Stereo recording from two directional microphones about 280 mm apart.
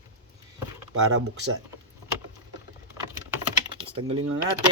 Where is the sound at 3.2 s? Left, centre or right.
Centre.